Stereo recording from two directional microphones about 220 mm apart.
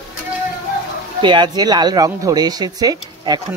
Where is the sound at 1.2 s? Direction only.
20° right (ahead or behind).